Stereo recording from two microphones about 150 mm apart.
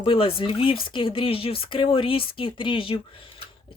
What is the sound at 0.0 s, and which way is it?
Speech, 35° left (ahead or behind).